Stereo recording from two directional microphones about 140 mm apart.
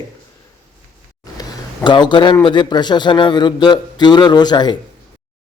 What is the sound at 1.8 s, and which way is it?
A man's voice, 35° left (ahead or behind).